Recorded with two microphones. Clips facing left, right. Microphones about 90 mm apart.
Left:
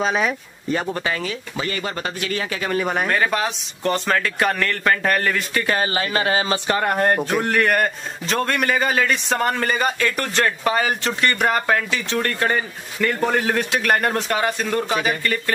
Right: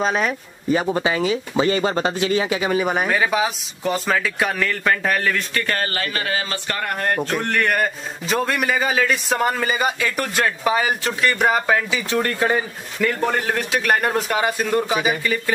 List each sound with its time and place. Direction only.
0.0 s speech: centre (ahead or behind)
0.9 s speech: 15° right (ahead or behind); by 6.0 s 15° left (ahead or behind)
6.1 s speech: 25° left (ahead or behind)
7.2 s speech: 5° left (ahead or behind)